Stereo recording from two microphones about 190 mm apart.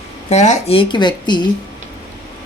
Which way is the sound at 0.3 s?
40° left (ahead or behind).